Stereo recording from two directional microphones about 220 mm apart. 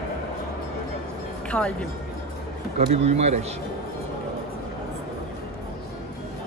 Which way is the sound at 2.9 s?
30° right (ahead or behind).